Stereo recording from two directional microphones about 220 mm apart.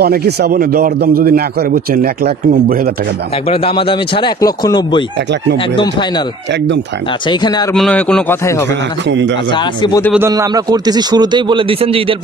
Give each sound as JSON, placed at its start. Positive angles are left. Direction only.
{"t": 0.0, "sound": "a man's voice", "side_deg": -45}
{"t": 3.4, "sound": "a man's voice", "side_deg": 25}
{"t": 7.2, "sound": "a man's voice", "side_deg": 20}
{"t": 7.7, "sound": "a man's voice", "side_deg": 5}
{"t": 10.1, "sound": "speech", "side_deg": -15}